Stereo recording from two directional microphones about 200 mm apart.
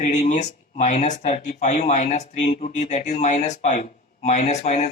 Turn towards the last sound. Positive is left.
turn(degrees=35)  # may be behind; listen again after turning